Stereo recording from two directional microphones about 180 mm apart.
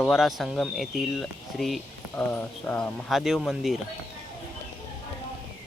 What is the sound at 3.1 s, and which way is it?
Speech, centre (ahead or behind).